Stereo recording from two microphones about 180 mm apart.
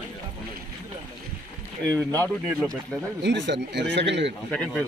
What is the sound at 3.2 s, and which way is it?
Speech, 80° right.